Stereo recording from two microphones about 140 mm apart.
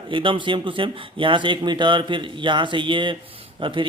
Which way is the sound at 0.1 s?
35° right (ahead or behind).